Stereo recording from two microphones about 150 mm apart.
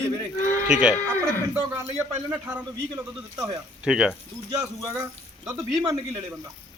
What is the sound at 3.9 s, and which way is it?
Speech, 5° right (ahead or behind).